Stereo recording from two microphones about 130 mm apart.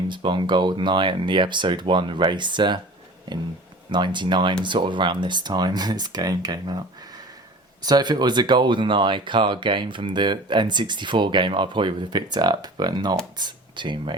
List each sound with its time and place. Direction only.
0.1 s speech: 35° right (ahead or behind)
3.9 s speech: 35° right (ahead or behind)
7.8 s speech: 30° right (ahead or behind)